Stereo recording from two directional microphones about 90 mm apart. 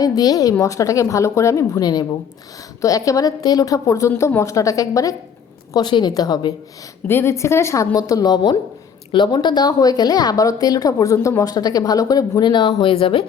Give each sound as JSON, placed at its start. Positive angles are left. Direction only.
{"t": 0.0, "sound": "a woman's voice", "side_deg": 45}
{"t": 4.1, "sound": "a woman's voice", "side_deg": 25}
{"t": 5.7, "sound": "speech", "side_deg": 55}
{"t": 7.1, "sound": "a woman's voice", "side_deg": 30}